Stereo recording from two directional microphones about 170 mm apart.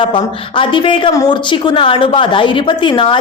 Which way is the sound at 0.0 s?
30° left (ahead or behind).